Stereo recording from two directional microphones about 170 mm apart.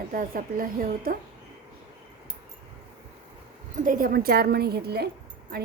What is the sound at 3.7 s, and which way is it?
A woman's voice, 55° right (ahead or behind).